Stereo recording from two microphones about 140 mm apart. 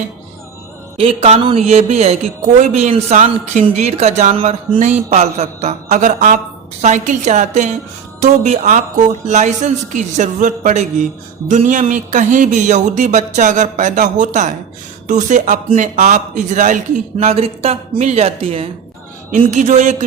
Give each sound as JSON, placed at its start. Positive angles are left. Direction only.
{"t": 0.9, "sound": "speech", "side_deg": -45}
{"t": 19.5, "sound": "speech", "side_deg": -55}